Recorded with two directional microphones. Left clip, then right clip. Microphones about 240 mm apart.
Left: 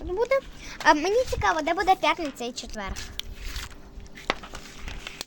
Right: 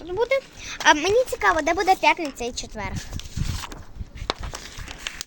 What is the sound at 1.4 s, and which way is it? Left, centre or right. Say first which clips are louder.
Speech: right 4 dB; right.